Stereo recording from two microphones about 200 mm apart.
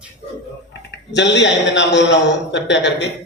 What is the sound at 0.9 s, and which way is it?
A man's voice, 60° left (ahead or behind).